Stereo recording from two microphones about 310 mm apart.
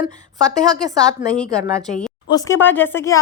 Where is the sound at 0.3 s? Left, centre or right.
Centre.